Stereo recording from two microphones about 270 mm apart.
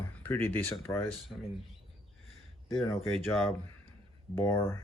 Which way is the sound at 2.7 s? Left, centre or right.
Centre.